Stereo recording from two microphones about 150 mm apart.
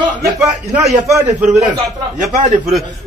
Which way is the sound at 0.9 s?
20° right (ahead or behind).